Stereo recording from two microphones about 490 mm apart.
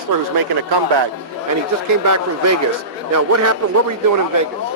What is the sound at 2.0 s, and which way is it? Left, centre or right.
Speech, right.